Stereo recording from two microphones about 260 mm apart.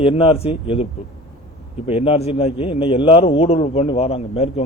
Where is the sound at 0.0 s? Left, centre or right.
Left.